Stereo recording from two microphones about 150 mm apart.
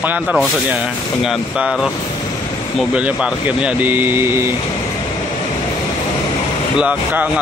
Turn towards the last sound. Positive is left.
turn(degrees=-10)  # may be behind; listen again after turning